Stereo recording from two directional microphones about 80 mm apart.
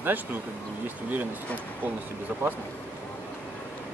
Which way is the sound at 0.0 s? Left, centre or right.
Right.